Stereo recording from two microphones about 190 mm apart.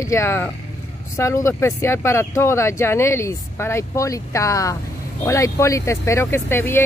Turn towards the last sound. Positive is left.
turn(degrees=10)  # may be behind; listen again after turning